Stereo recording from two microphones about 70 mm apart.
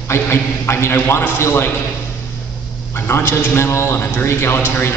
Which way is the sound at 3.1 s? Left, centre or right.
Left.